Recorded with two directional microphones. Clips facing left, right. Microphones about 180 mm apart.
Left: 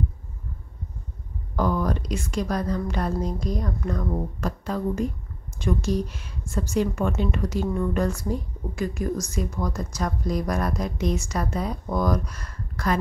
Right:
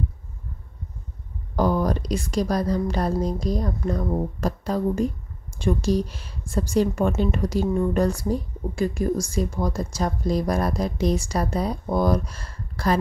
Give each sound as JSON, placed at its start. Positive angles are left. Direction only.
{"t": 1.6, "sound": "a woman's voice", "side_deg": -35}